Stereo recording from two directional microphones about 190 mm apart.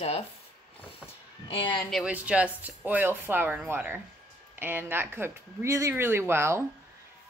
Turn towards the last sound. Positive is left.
turn(degrees=-15)  # may be behind; listen again after turning